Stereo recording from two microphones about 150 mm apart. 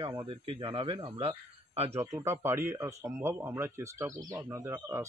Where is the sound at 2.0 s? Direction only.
20° right (ahead or behind).